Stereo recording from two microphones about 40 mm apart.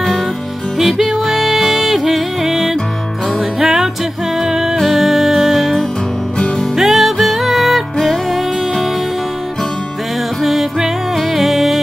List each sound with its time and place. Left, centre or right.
0.7 s music: centre
6.8 s music: centre
10.4 s music: centre